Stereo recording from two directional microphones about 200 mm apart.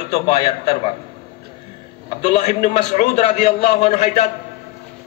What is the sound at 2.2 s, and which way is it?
A man's voice, 35° left (ahead or behind).